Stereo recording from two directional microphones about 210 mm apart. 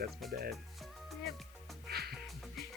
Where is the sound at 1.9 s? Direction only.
50° right (ahead or behind).